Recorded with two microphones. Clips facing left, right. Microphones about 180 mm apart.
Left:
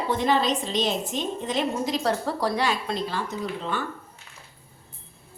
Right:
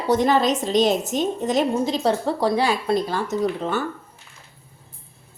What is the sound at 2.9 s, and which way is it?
Speech, 45° right (ahead or behind).